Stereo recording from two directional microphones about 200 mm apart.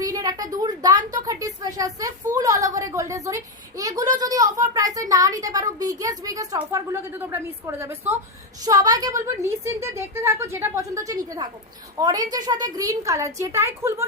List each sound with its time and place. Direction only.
0.0 s a woman's voice: 20° right (ahead or behind)